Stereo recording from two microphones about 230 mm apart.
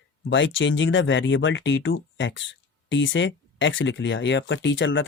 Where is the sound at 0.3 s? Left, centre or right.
Left.